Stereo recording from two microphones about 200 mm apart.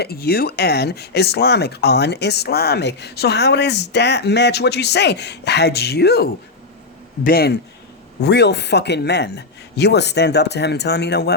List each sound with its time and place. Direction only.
0.0 s a man's voice: 50° left (ahead or behind)